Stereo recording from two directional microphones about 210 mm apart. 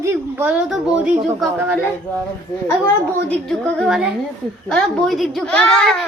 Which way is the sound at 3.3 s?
Centre (ahead or behind).